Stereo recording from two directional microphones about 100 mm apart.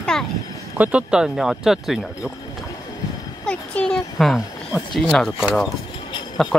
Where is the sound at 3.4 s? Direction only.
10° left (ahead or behind).